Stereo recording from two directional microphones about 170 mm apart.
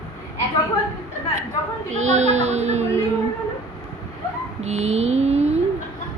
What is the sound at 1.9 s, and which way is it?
Speech, 45° right (ahead or behind).